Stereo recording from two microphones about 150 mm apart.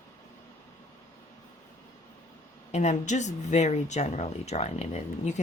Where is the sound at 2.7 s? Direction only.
50° left (ahead or behind).